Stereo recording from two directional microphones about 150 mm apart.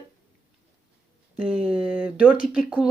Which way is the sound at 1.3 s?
10° right (ahead or behind).